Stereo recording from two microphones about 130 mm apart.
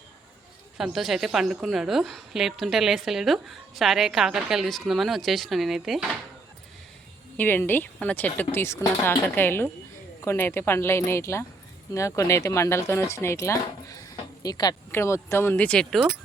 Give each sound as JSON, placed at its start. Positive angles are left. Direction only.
{"t": 0.8, "sound": "a woman's voice", "side_deg": 0}
{"t": 7.3, "sound": "speech", "side_deg": 15}
{"t": 14.9, "sound": "speech", "side_deg": 20}